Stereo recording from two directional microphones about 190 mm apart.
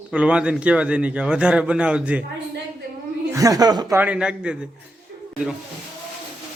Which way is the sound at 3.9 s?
5° right (ahead or behind).